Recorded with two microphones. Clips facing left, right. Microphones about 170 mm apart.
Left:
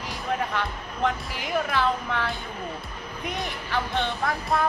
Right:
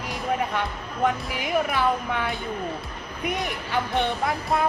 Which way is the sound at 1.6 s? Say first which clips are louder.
Right 1 dB; 15° right (ahead or behind).